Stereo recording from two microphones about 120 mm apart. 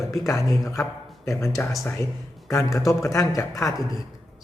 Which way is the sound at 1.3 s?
25° left (ahead or behind).